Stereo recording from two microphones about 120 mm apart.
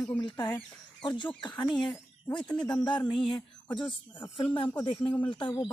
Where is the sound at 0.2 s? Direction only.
40° left (ahead or behind).